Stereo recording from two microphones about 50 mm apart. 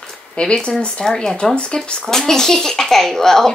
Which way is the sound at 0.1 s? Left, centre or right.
Centre.